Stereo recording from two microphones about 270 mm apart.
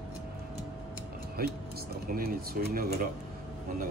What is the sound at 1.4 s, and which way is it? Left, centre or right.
Speech, right.